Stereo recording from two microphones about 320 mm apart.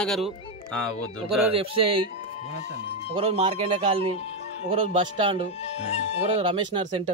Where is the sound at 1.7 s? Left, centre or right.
Right.